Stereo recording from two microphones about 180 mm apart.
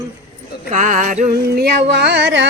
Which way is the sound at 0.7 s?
45° right (ahead or behind).